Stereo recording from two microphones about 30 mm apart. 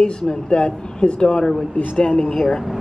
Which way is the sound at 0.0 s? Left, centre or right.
Left.